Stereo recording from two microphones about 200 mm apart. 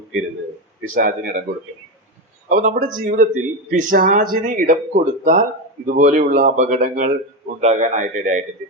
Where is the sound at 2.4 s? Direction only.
40° right (ahead or behind).